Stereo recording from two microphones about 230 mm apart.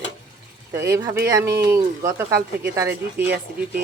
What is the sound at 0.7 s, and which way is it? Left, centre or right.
Speech, centre.